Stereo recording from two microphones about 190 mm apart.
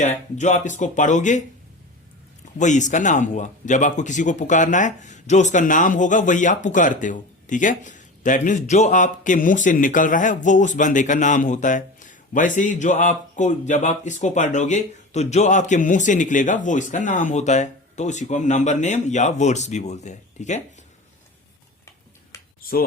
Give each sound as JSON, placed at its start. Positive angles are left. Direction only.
{"t": 0.0, "sound": "speech", "side_deg": 40}
{"t": 2.6, "sound": "speech", "side_deg": 40}
{"t": 22.3, "sound": "a sound", "side_deg": 15}